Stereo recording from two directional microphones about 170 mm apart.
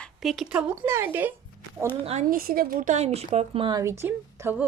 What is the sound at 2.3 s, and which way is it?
A woman's voice, 60° right (ahead or behind).